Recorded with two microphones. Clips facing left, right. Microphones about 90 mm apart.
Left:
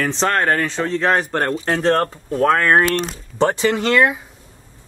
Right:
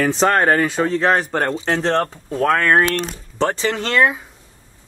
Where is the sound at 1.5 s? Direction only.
20° right (ahead or behind).